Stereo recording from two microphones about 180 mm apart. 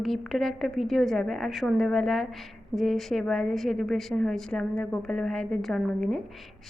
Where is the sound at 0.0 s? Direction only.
Centre (ahead or behind).